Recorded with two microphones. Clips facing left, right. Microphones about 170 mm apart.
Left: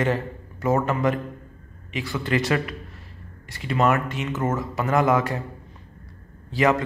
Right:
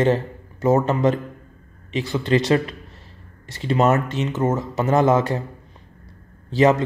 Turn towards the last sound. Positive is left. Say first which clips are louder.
# right 4 dB
turn(degrees=-25)  # may be behind; listen again after turning